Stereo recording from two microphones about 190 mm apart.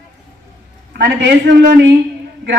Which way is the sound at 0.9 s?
70° right (ahead or behind).